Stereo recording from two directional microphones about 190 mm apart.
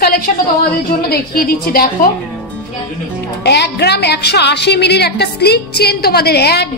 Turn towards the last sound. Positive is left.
turn(degrees=60)  # may be behind; listen again after turning